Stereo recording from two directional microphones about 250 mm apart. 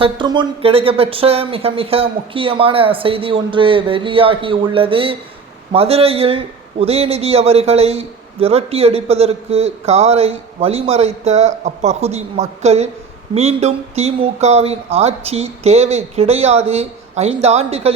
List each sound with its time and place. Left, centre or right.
0.0 s a man's voice: centre